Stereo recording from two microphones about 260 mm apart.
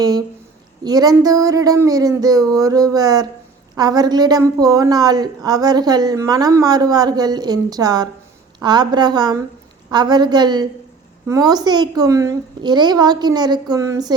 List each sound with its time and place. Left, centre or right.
0.0 s a woman's voice: centre